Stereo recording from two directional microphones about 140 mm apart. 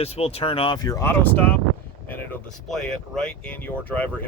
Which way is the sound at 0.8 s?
25° left (ahead or behind).